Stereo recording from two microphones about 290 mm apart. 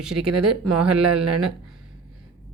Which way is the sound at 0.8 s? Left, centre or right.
Centre.